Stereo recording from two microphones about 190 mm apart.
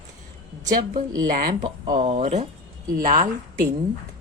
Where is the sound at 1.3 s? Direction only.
45° right (ahead or behind).